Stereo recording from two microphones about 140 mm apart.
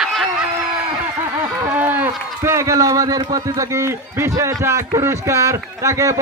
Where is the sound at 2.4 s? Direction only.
20° right (ahead or behind).